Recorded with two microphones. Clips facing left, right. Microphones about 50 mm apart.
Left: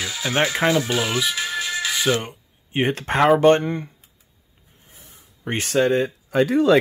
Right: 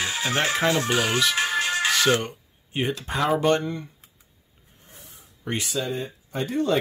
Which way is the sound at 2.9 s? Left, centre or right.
Left.